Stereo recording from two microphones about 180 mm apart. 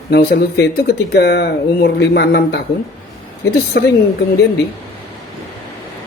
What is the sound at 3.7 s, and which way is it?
Speech, 75° left (ahead or behind).